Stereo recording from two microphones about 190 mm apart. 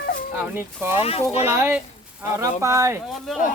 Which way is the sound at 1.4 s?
10° right (ahead or behind).